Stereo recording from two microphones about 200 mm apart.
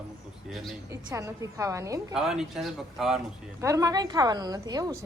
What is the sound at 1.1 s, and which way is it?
Speech, 15° right (ahead or behind).